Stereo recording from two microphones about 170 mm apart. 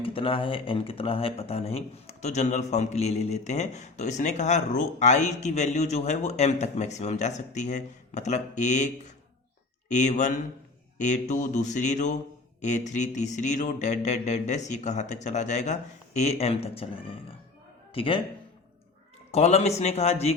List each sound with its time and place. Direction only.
0.0 s speech: 30° left (ahead or behind)
9.9 s speech: 45° left (ahead or behind)
19.3 s speech: 40° left (ahead or behind)